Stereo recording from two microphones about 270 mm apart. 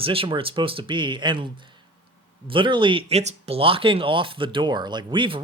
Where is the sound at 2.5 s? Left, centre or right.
Centre.